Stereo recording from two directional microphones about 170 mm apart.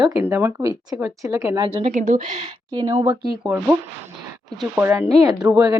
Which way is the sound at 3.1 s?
10° right (ahead or behind).